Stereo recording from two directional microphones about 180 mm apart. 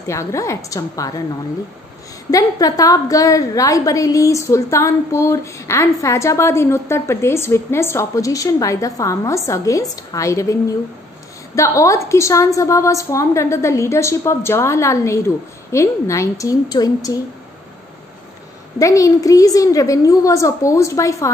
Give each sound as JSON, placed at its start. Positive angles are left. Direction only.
{"t": 0.0, "sound": "a woman's voice", "side_deg": 15}
{"t": 2.3, "sound": "a woman's voice", "side_deg": 20}
{"t": 18.8, "sound": "a woman's voice", "side_deg": 20}